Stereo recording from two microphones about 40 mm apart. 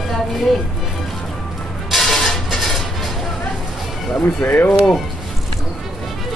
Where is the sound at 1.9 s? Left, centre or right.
Centre.